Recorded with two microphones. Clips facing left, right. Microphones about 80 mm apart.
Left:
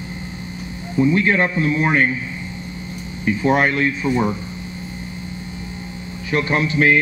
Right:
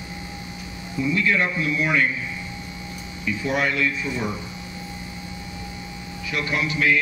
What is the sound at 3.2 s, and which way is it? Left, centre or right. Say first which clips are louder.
A man's voice: left 7 dB; left.